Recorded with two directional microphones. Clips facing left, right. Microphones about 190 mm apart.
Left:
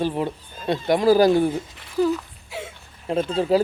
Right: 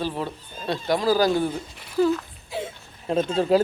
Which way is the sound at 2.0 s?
10° left (ahead or behind).